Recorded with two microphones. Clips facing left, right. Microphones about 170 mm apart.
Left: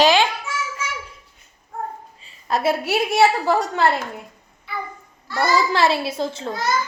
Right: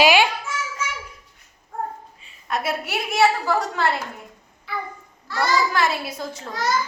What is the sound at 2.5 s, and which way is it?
A woman's voice, 30° left (ahead or behind).